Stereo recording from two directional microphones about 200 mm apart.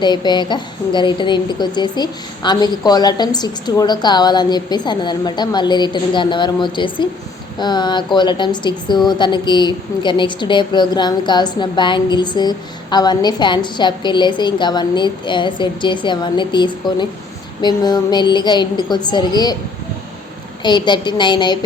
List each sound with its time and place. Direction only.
0.0 s a woman's voice: 20° left (ahead or behind)
20.6 s a woman's voice: 20° left (ahead or behind)